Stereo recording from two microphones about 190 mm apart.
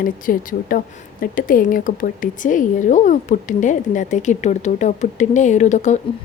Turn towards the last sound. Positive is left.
turn(degrees=40)  # may be behind; listen again after turning